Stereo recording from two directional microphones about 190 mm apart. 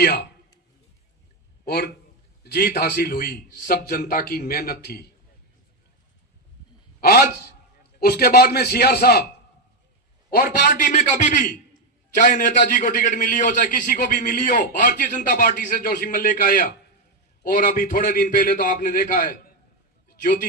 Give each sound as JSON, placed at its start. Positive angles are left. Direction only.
{"t": 0.0, "sound": "a man's voice", "side_deg": 55}
{"t": 1.6, "sound": "a man's voice", "side_deg": 55}
{"t": 7.0, "sound": "a man's voice", "side_deg": 55}
{"t": 10.6, "sound": "a man's voice", "side_deg": 45}